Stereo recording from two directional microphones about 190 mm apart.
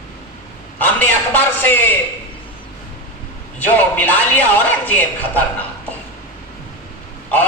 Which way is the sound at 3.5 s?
10° left (ahead or behind).